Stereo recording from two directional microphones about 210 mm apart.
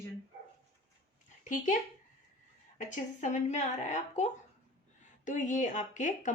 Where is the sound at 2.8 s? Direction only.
35° left (ahead or behind).